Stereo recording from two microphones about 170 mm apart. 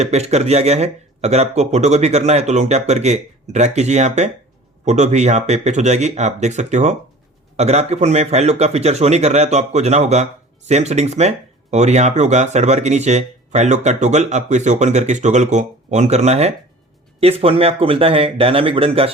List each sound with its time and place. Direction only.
0.0 s speech: 40° right (ahead or behind)